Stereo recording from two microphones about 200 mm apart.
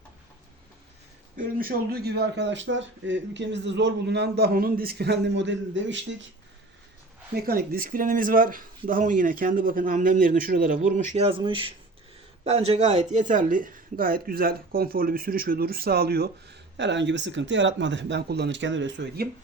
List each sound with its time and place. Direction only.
1.4 s speech: 45° right (ahead or behind); by 6.1 s 65° right (ahead or behind)
7.4 s speech: 45° right (ahead or behind)